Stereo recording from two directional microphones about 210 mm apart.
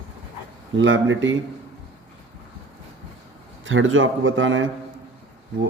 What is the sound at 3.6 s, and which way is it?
A man's voice, 65° right (ahead or behind).